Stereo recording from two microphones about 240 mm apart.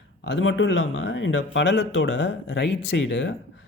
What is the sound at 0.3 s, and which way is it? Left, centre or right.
Speech, left.